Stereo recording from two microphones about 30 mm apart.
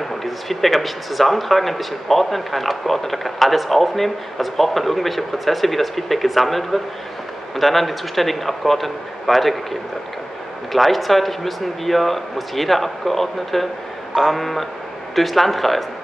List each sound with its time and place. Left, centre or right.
0.1 s speech: centre